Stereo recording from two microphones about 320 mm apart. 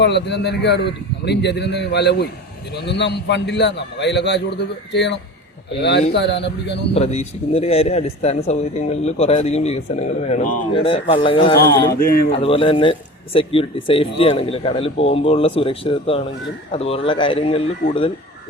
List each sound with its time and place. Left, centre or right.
0.0 s a man's voice: left
6.9 s speech: centre
11.9 s speech: left